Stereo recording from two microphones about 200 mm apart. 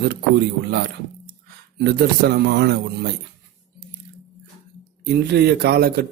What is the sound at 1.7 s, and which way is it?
A man's voice, 55° right (ahead or behind).